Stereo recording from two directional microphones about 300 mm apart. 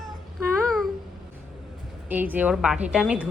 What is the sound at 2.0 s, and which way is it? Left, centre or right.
A woman's voice, centre.